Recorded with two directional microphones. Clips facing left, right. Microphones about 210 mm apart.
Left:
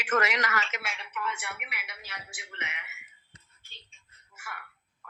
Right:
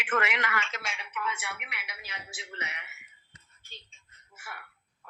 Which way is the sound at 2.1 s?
25° right (ahead or behind).